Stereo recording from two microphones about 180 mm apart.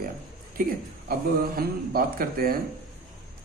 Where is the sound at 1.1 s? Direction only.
55° right (ahead or behind).